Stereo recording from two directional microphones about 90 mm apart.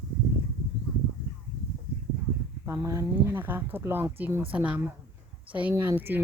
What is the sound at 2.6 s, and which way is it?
Speech, 35° right (ahead or behind).